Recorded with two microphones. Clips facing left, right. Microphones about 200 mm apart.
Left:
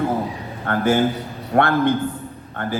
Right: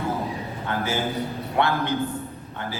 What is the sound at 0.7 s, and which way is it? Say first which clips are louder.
A man's voice: left 8 dB; 50° left (ahead or behind).